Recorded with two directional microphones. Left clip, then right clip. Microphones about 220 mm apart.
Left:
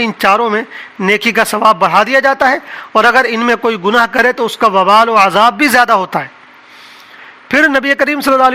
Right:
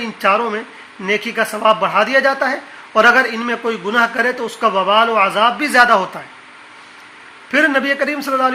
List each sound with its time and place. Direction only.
0.0 s a man's voice: 50° left (ahead or behind)
7.4 s a man's voice: 50° left (ahead or behind)